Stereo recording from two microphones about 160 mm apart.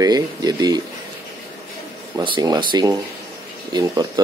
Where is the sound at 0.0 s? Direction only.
25° right (ahead or behind).